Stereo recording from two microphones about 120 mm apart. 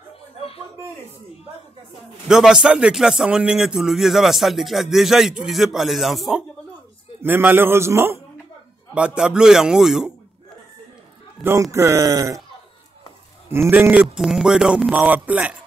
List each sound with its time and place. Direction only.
2.2 s a man's voice: 5° right (ahead or behind)
7.2 s a man's voice: 15° right (ahead or behind)
8.9 s a man's voice: 10° right (ahead or behind)
11.7 s a man's voice: 25° right (ahead or behind)
13.5 s a man's voice: 20° right (ahead or behind)
14.0 s speech: 5° right (ahead or behind)